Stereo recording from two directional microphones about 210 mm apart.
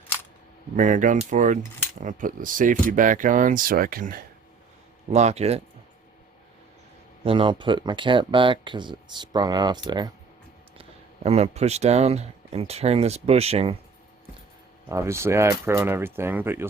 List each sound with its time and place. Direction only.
0.8 s speech: 40° right (ahead or behind)
5.1 s speech: 30° right (ahead or behind)
7.3 s speech: 25° right (ahead or behind)
10.8 s speech: 30° right (ahead or behind)
14.8 s speech: 15° right (ahead or behind)